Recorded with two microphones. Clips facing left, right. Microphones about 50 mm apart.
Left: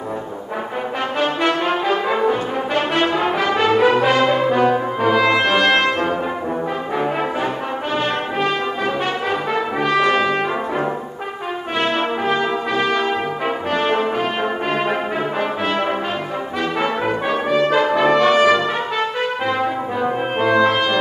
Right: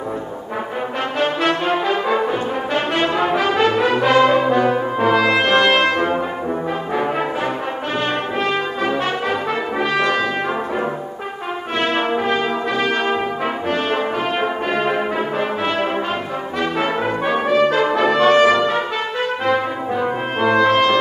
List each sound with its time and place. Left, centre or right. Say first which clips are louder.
1.4 s brass instrument: even; centre
9.5 s brass instrument: left 1 dB; centre
11.8 s brass instrument: even; centre
13.7 s brass instrument: left 2 dB; centre
17.0 s brass instrument: right 1 dB; centre
20.0 s brass instrument: even; centre